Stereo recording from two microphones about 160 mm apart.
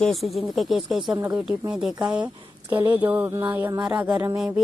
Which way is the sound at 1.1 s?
15° right (ahead or behind).